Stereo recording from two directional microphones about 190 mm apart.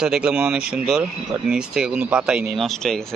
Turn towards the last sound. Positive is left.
turn(degrees=0)  # may be behind; listen again after turning